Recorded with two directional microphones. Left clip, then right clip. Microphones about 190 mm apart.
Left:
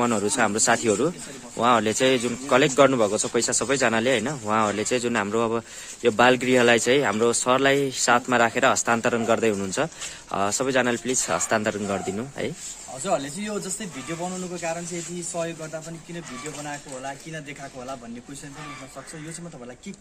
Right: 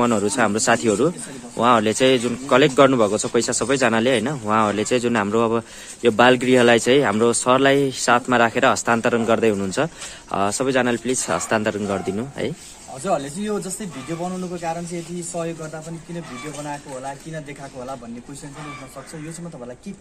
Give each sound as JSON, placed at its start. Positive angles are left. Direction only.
{"t": 0.0, "sound": "a man's voice", "side_deg": 0}
{"t": 11.9, "sound": "a man's voice", "side_deg": 0}
{"t": 13.0, "sound": "speech", "side_deg": 15}